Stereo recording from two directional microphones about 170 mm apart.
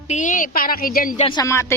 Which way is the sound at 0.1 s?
50° left (ahead or behind).